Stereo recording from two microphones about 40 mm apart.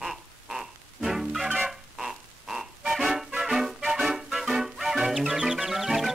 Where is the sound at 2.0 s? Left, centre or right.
Centre.